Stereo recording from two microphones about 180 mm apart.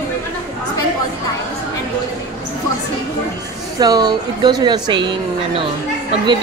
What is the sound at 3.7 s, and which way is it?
A woman's voice, 20° right (ahead or behind).